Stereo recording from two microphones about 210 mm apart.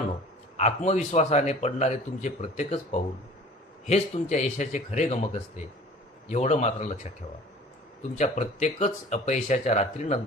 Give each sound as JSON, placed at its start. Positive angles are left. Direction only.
{"t": 0.5, "sound": "a man's voice", "side_deg": 30}
{"t": 8.2, "sound": "a man's voice", "side_deg": 35}